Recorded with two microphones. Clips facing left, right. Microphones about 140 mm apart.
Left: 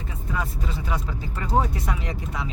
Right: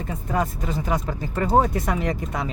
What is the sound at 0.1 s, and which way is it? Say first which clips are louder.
Speech: right 6 dB; 45° right (ahead or behind).